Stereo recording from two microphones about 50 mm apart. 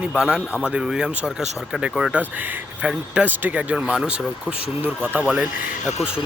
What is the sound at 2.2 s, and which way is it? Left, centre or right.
Speech, right.